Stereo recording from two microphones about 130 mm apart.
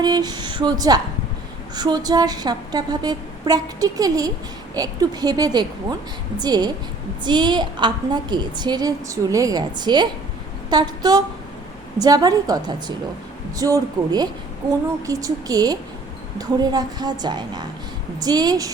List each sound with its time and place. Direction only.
0.0 s a woman's voice: 30° right (ahead or behind)